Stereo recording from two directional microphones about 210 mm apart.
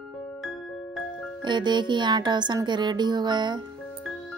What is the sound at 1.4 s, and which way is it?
Speech, 20° right (ahead or behind).